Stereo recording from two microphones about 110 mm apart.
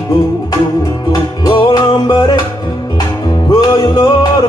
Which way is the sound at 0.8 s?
35° left (ahead or behind).